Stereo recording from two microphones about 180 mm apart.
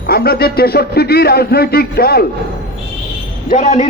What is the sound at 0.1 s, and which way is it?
A man's voice, 55° left (ahead or behind).